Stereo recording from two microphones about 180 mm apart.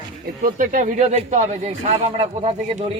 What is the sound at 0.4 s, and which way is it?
Speech, 45° right (ahead or behind).